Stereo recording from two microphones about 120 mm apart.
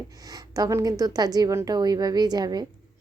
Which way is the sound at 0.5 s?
30° right (ahead or behind).